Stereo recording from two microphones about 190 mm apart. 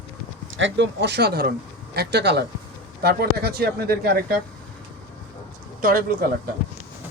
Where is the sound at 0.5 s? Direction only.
75° right (ahead or behind); by 4.4 s 50° right (ahead or behind).